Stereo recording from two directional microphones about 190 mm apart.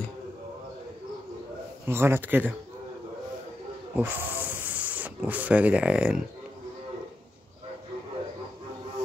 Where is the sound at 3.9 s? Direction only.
10° right (ahead or behind).